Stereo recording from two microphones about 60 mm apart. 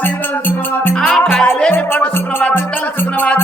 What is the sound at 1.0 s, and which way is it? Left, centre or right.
Music, left.